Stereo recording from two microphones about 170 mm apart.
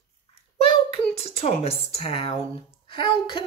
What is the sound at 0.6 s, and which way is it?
Speech, 35° left (ahead or behind).